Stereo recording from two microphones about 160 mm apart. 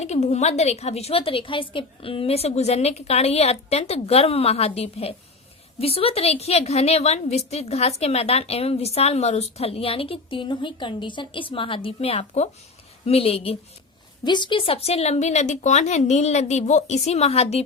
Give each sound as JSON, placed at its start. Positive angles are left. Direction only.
{"t": 0.0, "sound": "a woman's voice", "side_deg": 45}